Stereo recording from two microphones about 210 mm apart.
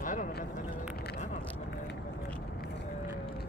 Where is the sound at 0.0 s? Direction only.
40° left (ahead or behind).